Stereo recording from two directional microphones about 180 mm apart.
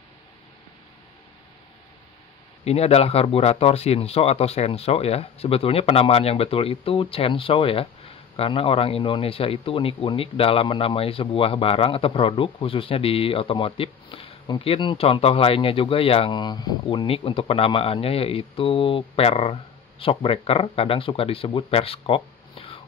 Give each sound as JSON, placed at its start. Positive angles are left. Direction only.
{"t": 2.6, "sound": "speech", "side_deg": 35}